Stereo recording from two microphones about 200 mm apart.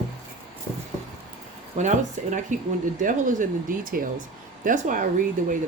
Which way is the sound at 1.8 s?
40° right (ahead or behind).